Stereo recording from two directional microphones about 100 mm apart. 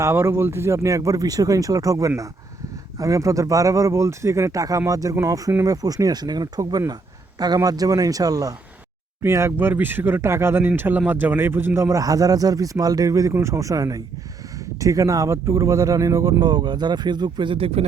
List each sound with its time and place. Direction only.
0.0 s speech: 25° right (ahead or behind)
9.2 s speech: 25° right (ahead or behind); by 17.8 s 75° right (ahead or behind)